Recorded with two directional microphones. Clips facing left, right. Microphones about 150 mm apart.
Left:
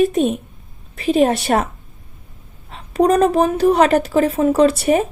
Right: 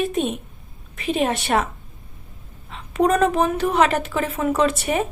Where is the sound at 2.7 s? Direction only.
35° left (ahead or behind).